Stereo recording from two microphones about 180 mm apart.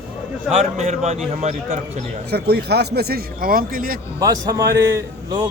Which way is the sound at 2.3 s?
65° right (ahead or behind).